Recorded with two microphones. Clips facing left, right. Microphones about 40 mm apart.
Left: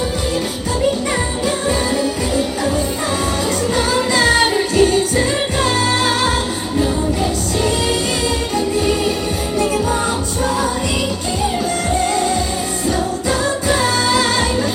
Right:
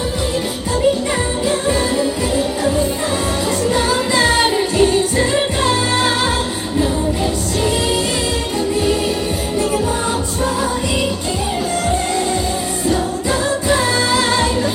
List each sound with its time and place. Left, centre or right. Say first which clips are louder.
2.0 s music: right 1 dB; centre
3.8 s music: left 1 dB; centre
13.7 s music: even; centre